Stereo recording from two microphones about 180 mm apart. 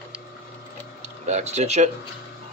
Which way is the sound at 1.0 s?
40° right (ahead or behind).